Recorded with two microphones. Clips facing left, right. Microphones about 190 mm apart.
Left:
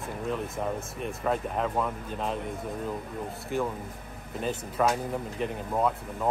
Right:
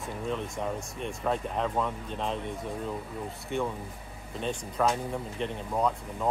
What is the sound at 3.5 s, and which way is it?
Speech, 5° left (ahead or behind).